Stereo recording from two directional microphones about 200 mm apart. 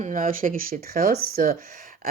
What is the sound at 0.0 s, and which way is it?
Speech, 40° right (ahead or behind).